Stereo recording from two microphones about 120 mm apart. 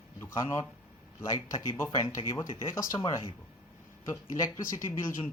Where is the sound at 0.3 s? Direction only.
25° left (ahead or behind).